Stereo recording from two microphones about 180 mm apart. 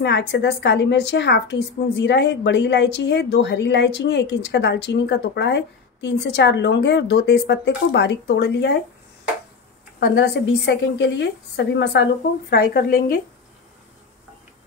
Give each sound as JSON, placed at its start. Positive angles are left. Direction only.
{"t": 0.0, "sound": "a woman's voice", "side_deg": 70}
{"t": 9.9, "sound": "a woman's voice", "side_deg": 70}